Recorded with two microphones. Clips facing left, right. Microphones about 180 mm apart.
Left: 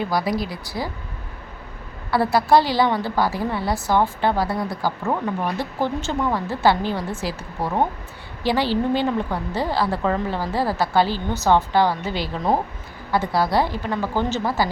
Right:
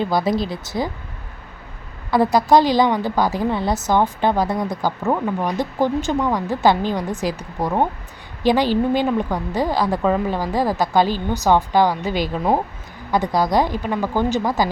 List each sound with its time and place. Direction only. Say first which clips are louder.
0.0 s speech: right 3 dB; 25° right (ahead or behind)
2.0 s a woman's voice: right 3 dB; 15° right (ahead or behind)